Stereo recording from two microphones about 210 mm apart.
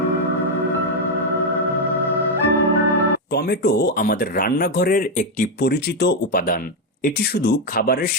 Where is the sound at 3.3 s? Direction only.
50° left (ahead or behind).